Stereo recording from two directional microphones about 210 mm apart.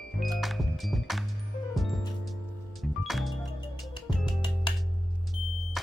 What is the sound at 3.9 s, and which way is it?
Music, 20° left (ahead or behind).